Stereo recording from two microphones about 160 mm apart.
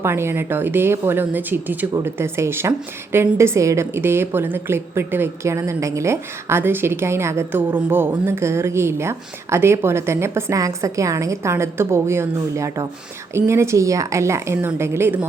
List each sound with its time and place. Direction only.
0.0 s a woman's voice: 15° right (ahead or behind)